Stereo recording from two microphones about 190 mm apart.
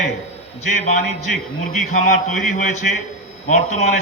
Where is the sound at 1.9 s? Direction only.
40° left (ahead or behind).